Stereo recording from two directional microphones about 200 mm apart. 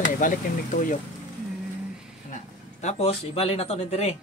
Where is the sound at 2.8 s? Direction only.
30° left (ahead or behind).